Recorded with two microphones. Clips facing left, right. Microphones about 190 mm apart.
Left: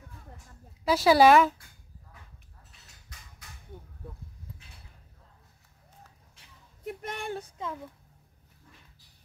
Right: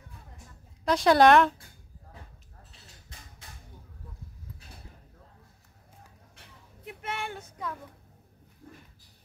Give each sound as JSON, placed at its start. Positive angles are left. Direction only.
{"t": 0.8, "sound": "speech", "side_deg": 5}
{"t": 6.8, "sound": "child singing", "side_deg": 40}
{"t": 8.6, "sound": "a sound", "side_deg": -40}